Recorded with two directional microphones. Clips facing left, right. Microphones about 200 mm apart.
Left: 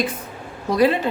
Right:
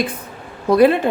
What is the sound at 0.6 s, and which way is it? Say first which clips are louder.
Speech: right 5 dB; 55° right (ahead or behind).